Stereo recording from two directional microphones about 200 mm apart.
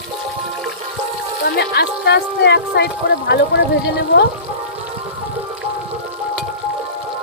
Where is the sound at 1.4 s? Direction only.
55° left (ahead or behind).